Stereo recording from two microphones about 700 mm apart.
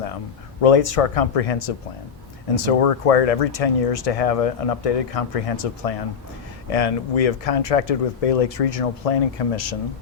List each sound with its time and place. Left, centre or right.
0.6 s speech: left